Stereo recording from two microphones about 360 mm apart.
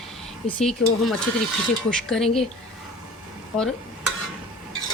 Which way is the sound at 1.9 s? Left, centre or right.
Centre.